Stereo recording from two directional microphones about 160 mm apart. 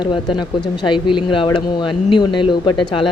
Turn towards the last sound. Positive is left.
turn(degrees=30)  # may be behind; listen again after turning